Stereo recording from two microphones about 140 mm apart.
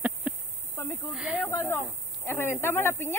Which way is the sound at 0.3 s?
5° right (ahead or behind).